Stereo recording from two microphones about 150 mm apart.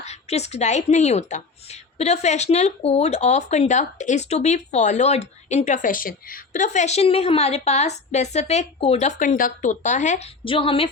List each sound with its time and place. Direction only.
0.0 s a woman's voice: 45° left (ahead or behind)
10.4 s a woman's voice: 35° left (ahead or behind)